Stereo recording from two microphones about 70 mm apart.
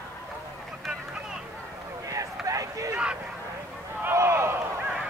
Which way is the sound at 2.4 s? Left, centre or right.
Right.